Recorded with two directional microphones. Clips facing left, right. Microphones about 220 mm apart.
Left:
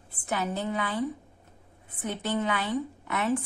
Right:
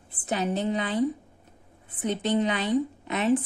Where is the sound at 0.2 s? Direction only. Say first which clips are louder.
Right 3 dB; 20° right (ahead or behind).